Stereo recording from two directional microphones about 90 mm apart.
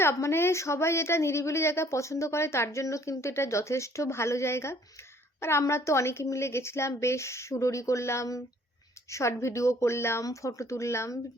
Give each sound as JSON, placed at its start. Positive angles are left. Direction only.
{"t": 0.0, "sound": "a woman's voice", "side_deg": 30}